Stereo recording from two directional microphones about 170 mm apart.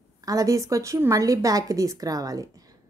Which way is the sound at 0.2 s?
20° right (ahead or behind).